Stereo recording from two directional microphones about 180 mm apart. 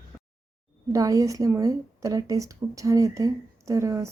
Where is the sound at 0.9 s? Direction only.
20° right (ahead or behind).